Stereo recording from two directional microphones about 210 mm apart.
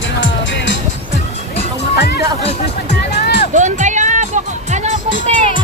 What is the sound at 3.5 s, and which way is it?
Music, 35° right (ahead or behind).